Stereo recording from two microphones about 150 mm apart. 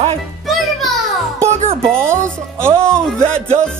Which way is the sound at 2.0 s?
15° right (ahead or behind).